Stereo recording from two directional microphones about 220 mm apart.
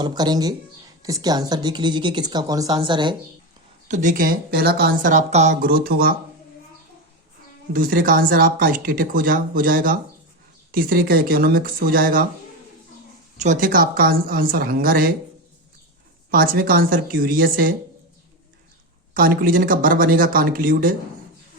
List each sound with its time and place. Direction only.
0.0 s speech: 20° right (ahead or behind)
3.8 s speech: 35° right (ahead or behind)
7.7 s speech: 40° right (ahead or behind)
13.4 s speech: 35° right (ahead or behind)
16.3 s speech: 40° right (ahead or behind)
19.1 s speech: 40° right (ahead or behind)